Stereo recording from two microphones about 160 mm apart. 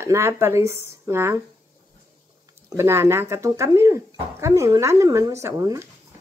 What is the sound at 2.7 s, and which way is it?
Speech, 15° right (ahead or behind).